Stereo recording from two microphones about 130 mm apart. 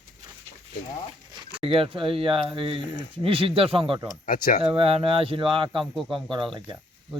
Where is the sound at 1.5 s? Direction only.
45° right (ahead or behind).